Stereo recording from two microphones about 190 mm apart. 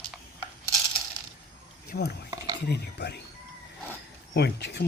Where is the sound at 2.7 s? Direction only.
65° left (ahead or behind).